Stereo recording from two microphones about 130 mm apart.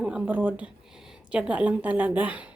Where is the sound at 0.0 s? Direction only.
10° right (ahead or behind).